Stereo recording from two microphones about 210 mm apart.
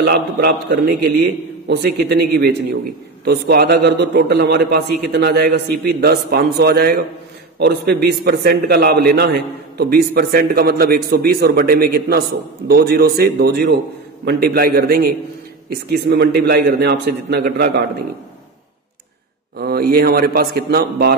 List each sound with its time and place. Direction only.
0.0 s a man's voice: 50° right (ahead or behind)
19.5 s a man's voice: 45° right (ahead or behind)